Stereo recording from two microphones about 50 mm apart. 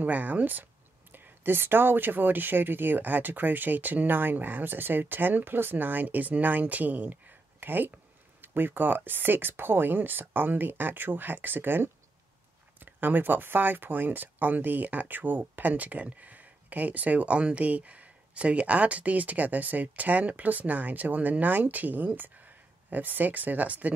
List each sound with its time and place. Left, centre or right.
0.0 s speech: right
1.1 s speech: right